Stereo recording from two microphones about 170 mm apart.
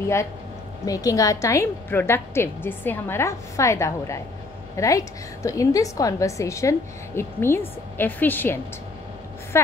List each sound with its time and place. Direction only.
0.8 s a woman's voice: 20° left (ahead or behind)